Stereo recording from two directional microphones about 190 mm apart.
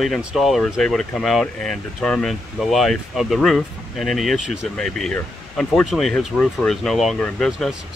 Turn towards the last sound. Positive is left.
turn(degrees=5)  # may be behind; listen again after turning